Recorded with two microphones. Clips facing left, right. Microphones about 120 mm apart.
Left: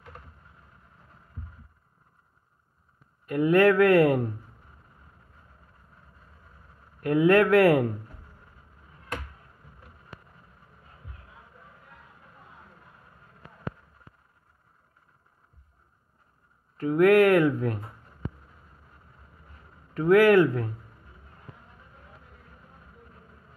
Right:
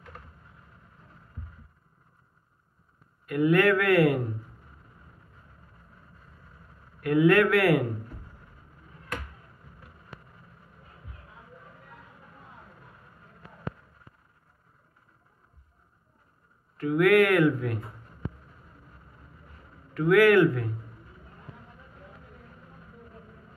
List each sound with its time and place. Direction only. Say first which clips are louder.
3.3 s speech: left 2 dB; 30° left (ahead or behind)
7.0 s speech: left 1 dB; 30° left (ahead or behind)
16.7 s speech: left 2 dB; 35° left (ahead or behind)
19.9 s speech: left 1 dB; 30° left (ahead or behind)